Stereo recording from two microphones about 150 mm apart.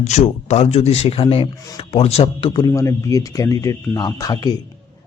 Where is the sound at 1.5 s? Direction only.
25° left (ahead or behind).